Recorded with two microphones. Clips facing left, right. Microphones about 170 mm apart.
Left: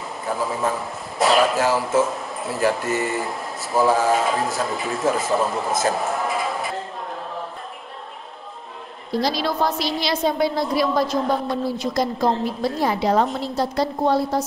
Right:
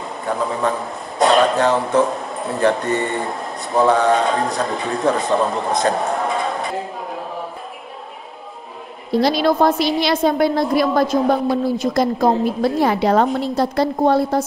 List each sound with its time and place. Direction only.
0.3 s a man's voice: 5° left (ahead or behind)
9.1 s a woman's voice: 60° right (ahead or behind)